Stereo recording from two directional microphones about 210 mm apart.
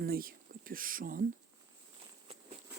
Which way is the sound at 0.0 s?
45° right (ahead or behind).